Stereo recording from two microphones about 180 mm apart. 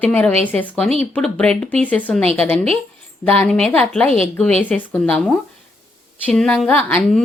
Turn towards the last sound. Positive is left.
turn(degrees=0)  # may be behind; listen again after turning